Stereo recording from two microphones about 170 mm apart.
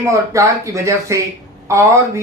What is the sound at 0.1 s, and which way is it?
Speech, 20° right (ahead or behind).